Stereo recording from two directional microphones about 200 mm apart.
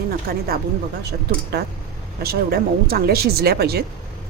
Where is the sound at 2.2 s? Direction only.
50° right (ahead or behind).